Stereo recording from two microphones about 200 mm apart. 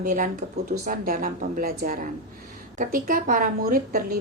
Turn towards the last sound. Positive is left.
turn(degrees=-45)  # may be behind; listen again after turning